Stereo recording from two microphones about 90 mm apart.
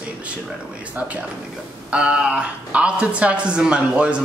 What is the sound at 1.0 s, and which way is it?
A man's voice, 20° right (ahead or behind).